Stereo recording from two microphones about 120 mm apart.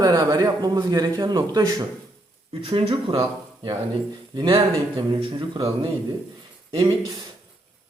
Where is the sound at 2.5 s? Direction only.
45° right (ahead or behind).